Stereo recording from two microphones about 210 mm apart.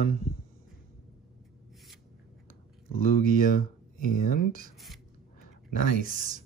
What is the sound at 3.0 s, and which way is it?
Speech, 40° left (ahead or behind).